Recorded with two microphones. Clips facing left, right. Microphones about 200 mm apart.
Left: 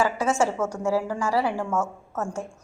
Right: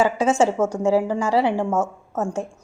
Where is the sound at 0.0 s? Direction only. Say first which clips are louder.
Right 5 dB; 20° right (ahead or behind).